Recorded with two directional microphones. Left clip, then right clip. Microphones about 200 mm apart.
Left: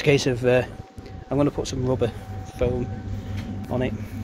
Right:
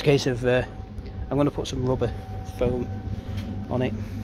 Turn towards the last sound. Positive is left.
turn(degrees=-10)  # may be behind; listen again after turning